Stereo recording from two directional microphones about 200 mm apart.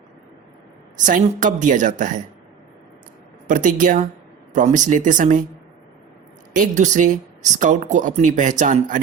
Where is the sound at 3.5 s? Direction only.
40° right (ahead or behind).